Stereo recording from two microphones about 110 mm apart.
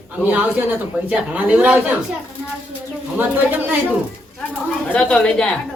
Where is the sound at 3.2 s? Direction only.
15° right (ahead or behind).